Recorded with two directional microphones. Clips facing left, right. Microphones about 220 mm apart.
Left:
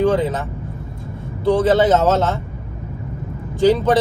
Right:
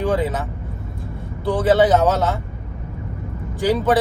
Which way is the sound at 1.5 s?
Centre (ahead or behind).